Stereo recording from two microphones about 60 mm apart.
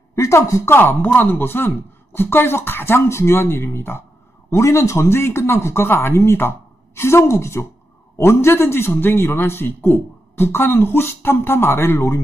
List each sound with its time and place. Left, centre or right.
0.1 s speech: left
0.7 s speech: left
4.5 s a man's voice: left